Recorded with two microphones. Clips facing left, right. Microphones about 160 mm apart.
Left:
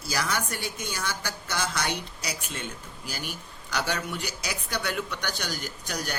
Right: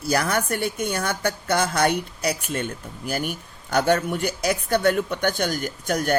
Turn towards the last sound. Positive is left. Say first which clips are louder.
# right 10 dB
turn(degrees=-50)  # may be behind; listen again after turning